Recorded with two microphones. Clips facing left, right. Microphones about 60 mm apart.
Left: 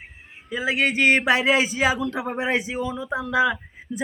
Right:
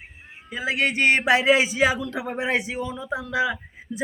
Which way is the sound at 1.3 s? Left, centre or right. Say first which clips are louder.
Right 1 dB; centre.